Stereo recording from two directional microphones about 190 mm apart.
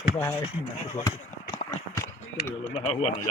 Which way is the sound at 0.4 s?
30° left (ahead or behind).